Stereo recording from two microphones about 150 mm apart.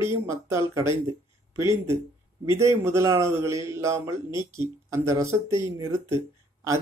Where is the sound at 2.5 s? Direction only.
20° right (ahead or behind).